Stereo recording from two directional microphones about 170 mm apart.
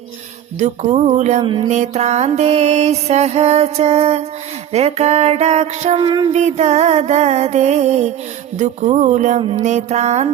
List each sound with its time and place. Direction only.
0.6 s music: 40° right (ahead or behind)
1.4 s music: 30° right (ahead or behind)
1.7 s music: 45° right (ahead or behind)
8.5 s speech: 45° right (ahead or behind)
9.6 s music: 45° right (ahead or behind)